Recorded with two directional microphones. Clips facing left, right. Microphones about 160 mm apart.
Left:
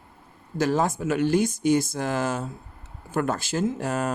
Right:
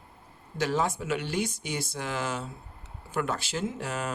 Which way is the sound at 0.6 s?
45° left (ahead or behind).